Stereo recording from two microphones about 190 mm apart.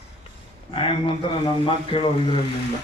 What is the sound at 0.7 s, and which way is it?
A man's voice, 30° left (ahead or behind).